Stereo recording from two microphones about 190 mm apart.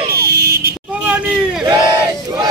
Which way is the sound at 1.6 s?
20° right (ahead or behind).